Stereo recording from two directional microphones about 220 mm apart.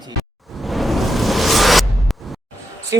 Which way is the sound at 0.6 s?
Centre (ahead or behind).